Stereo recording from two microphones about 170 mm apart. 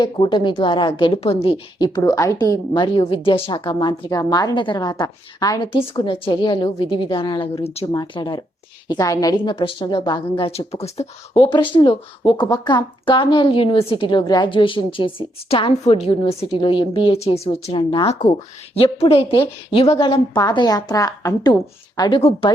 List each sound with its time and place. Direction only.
0.0 s a woman's voice: 30° left (ahead or behind)
2.0 s a woman's voice: 20° left (ahead or behind)
5.9 s a woman's voice: 30° left (ahead or behind)
7.9 s a woman's voice: 25° left (ahead or behind)
11.5 s a woman's voice: 25° left (ahead or behind)